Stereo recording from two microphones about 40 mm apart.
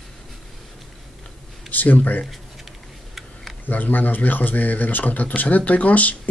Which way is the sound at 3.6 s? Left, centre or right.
Left.